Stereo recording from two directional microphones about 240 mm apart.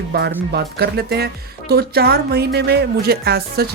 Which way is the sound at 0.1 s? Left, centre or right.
Right.